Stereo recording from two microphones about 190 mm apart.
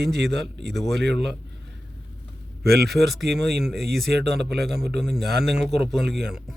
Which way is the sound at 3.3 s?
60° right (ahead or behind).